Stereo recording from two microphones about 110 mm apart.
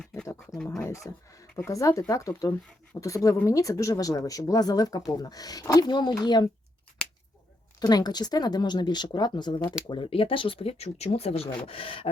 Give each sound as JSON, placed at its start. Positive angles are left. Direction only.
{"t": 0.5, "sound": "speech", "side_deg": 5}
{"t": 0.8, "sound": "speech", "side_deg": 25}
{"t": 2.9, "sound": "speech", "side_deg": 15}
{"t": 3.4, "sound": "speech", "side_deg": 30}
{"t": 7.8, "sound": "speech", "side_deg": 40}